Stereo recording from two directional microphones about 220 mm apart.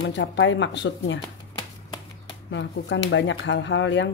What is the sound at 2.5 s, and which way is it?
Speech, 55° left (ahead or behind).